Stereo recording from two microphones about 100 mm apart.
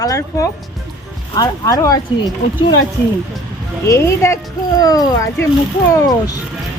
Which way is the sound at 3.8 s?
30° left (ahead or behind).